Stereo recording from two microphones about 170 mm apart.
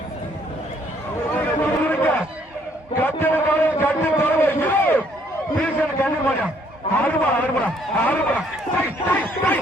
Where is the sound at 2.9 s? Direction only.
10° left (ahead or behind).